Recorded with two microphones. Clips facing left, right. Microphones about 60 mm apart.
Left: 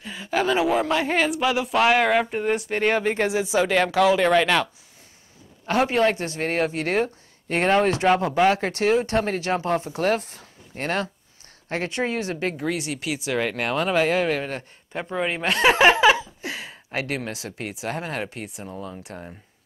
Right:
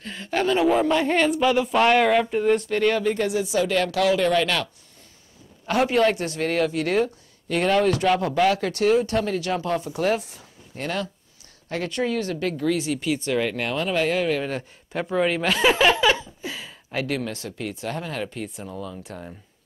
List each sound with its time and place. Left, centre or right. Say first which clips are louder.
0.0 s speech: even; centre
2.9 s speech: even; left
3.3 s speech: left 1 dB; left
5.7 s speech: even; left
8.5 s speech: right 1 dB; left
12.7 s speech: right 4 dB; centre
16.4 s a sound: left 1 dB; centre
17.5 s speech: even; left
18.4 s speech: right 2 dB; centre
19.1 s speech: even; left